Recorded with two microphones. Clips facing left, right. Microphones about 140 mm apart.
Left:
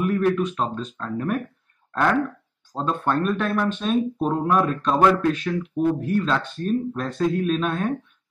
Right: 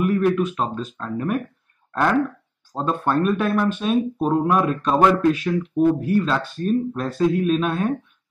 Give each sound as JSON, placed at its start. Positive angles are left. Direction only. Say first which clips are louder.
{"t": 0.0, "sound": "speech", "louder": "right 2 dB", "side_deg": -5}